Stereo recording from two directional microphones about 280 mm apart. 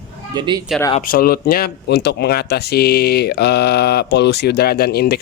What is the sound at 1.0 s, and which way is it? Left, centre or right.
Speech, left.